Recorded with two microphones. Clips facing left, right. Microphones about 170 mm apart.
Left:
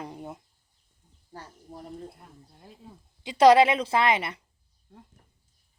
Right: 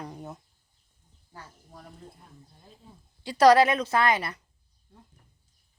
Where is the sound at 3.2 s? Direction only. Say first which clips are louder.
Left 1 dB; 20° left (ahead or behind).